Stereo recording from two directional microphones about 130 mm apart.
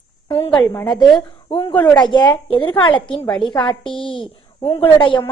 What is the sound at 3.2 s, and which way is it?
Speech, 10° left (ahead or behind).